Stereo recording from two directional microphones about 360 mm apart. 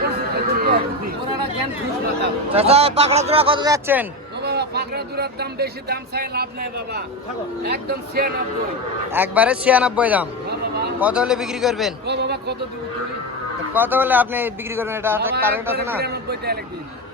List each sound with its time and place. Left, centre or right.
0.5 s speech: right
2.5 s speech: centre
4.4 s speech: right
7.6 s speech: right
9.1 s a man's voice: centre
12.0 s speech: right
13.7 s a man's voice: centre
16.0 s speech: right